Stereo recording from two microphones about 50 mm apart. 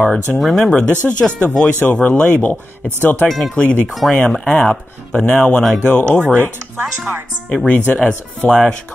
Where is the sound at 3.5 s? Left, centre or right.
Left.